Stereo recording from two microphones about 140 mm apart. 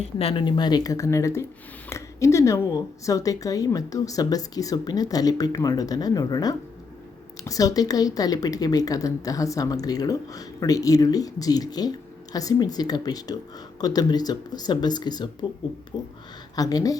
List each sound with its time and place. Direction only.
0.2 s speech: 45° left (ahead or behind)
0.4 s a woman's voice: 30° left (ahead or behind)